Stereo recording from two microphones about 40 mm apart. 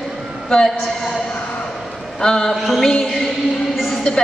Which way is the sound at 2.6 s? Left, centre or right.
Centre.